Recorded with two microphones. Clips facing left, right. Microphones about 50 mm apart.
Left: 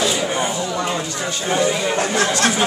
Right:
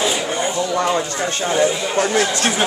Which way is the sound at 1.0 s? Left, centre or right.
Right.